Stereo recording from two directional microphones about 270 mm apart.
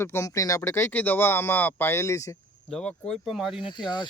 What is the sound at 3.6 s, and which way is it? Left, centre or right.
Speech, centre.